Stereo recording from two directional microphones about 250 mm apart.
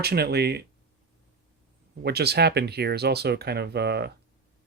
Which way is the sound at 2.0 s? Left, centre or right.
Right.